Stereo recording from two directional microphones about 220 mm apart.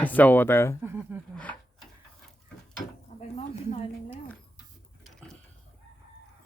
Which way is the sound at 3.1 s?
30° left (ahead or behind).